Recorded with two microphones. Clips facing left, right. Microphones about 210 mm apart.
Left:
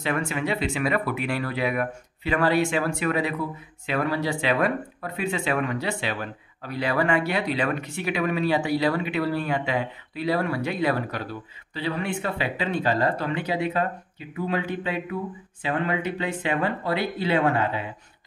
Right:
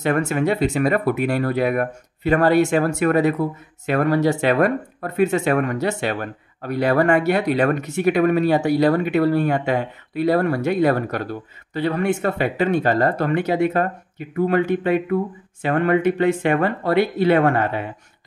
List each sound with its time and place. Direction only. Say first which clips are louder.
0.0 s speech: right 7 dB; 45° right (ahead or behind)